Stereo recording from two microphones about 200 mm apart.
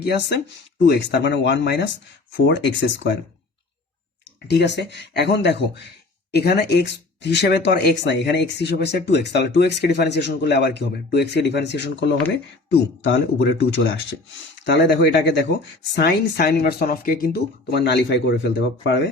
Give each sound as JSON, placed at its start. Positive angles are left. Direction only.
{"t": 0.0, "sound": "speech", "side_deg": 55}
{"t": 4.4, "sound": "speech", "side_deg": 60}